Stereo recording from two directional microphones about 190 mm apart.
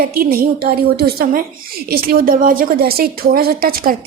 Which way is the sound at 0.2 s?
50° right (ahead or behind).